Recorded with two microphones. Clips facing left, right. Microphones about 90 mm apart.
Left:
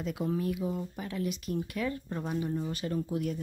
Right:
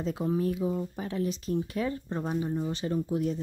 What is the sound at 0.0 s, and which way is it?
Speech, 30° right (ahead or behind).